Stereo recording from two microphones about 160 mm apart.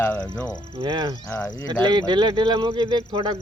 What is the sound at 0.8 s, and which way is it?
Speech, 30° right (ahead or behind).